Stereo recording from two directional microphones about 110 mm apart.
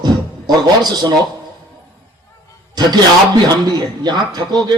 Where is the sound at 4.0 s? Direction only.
40° right (ahead or behind).